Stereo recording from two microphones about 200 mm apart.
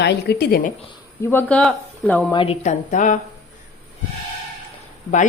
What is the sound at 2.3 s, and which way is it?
Speech, 25° left (ahead or behind).